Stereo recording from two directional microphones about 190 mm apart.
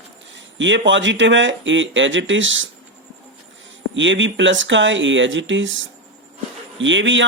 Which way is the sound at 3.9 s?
75° right (ahead or behind).